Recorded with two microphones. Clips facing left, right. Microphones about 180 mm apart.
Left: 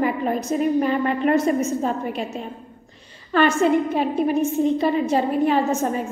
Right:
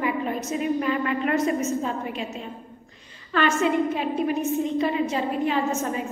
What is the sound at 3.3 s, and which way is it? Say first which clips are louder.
A woman's voice: left 4 dB; 45° left (ahead or behind).